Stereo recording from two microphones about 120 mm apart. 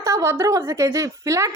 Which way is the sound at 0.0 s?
25° right (ahead or behind).